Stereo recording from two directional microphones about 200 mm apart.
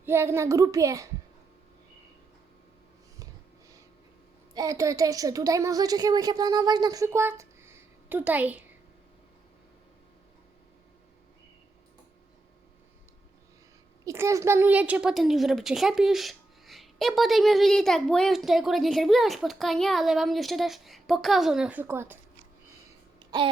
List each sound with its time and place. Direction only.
0.0 s a woman's voice: 10° right (ahead or behind)
4.5 s a woman's voice: 15° right (ahead or behind)
14.0 s a woman's voice: 15° right (ahead or behind)
23.2 s babbling: 20° right (ahead or behind)